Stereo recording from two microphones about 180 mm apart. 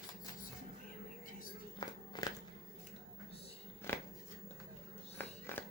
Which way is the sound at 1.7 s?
20° left (ahead or behind).